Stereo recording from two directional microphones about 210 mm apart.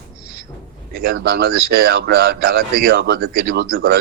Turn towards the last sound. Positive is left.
turn(degrees=-45)  # may be behind; listen again after turning